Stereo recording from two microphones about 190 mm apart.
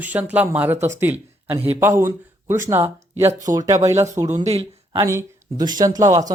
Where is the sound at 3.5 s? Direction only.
15° right (ahead or behind).